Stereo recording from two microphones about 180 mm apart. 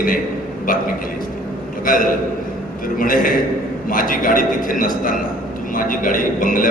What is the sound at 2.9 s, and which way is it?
A man's voice, 50° left (ahead or behind).